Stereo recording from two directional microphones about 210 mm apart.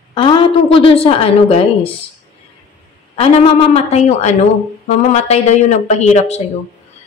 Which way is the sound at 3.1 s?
30° left (ahead or behind).